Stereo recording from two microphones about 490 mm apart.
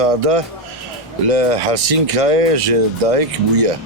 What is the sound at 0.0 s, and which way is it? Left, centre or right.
Speech, right.